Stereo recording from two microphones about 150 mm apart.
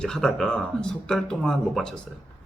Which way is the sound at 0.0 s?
5° left (ahead or behind).